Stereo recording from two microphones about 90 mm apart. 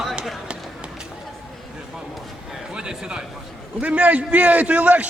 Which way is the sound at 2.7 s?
10° right (ahead or behind).